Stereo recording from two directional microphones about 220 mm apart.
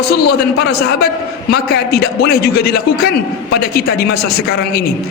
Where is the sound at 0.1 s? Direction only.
45° left (ahead or behind).